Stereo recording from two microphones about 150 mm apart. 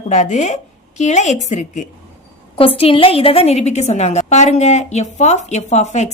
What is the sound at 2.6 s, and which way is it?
A woman's voice, 40° left (ahead or behind).